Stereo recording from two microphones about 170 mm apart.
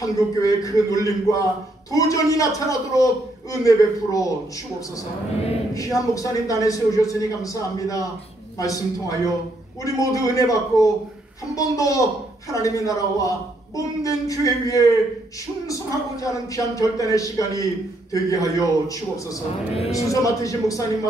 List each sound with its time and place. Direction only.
0.0 s speech: 20° left (ahead or behind)
5.8 s speech: 20° left (ahead or behind)